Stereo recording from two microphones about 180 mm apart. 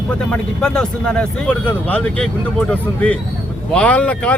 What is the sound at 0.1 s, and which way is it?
Speech, 5° left (ahead or behind).